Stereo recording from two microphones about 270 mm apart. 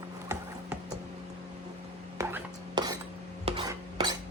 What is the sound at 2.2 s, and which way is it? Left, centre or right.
Cutlery, centre.